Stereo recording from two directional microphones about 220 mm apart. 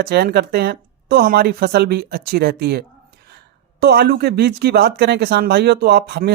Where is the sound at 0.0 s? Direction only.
45° right (ahead or behind).